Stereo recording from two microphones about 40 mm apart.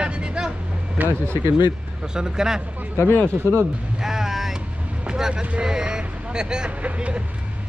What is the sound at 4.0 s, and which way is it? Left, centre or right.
Vehicle, centre.